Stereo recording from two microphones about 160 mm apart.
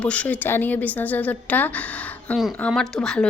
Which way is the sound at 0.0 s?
10° left (ahead or behind).